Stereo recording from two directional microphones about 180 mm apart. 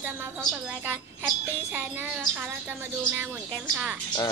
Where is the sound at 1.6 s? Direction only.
10° right (ahead or behind).